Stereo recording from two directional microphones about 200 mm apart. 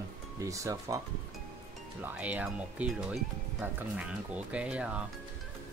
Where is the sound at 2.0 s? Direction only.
5° right (ahead or behind).